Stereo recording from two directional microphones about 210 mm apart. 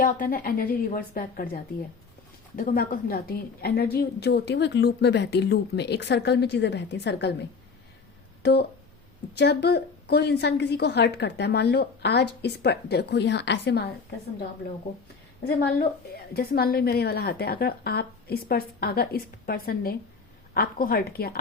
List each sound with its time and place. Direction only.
0.0 s a woman's voice: 40° left (ahead or behind)
15.4 s a woman's voice: 50° left (ahead or behind)